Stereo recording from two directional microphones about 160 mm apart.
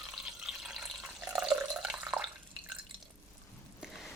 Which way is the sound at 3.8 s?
Centre (ahead or behind).